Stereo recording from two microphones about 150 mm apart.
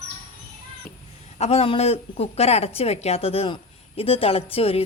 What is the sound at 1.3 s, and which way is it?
A woman's voice, 45° left (ahead or behind).